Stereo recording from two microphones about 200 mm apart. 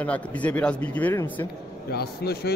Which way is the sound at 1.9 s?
50° left (ahead or behind).